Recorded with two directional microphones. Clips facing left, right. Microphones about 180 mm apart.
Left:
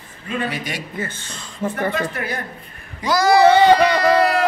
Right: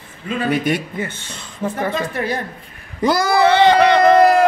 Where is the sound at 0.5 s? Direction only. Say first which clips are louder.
Right 10 dB; 50° right (ahead or behind).